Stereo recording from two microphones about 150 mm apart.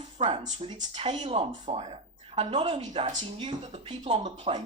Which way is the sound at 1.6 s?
45° right (ahead or behind).